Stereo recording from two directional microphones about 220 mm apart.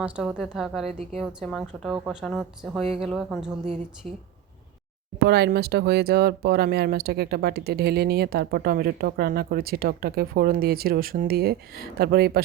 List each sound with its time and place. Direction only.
0.0 s a woman's voice: 5° right (ahead or behind)
5.2 s speech: 50° right (ahead or behind)